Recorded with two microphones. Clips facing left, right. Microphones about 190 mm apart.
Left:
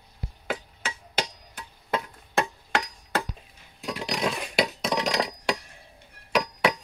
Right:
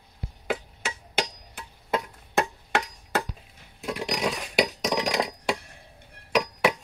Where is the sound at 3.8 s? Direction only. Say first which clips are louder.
Right 1 dB; 5° right (ahead or behind).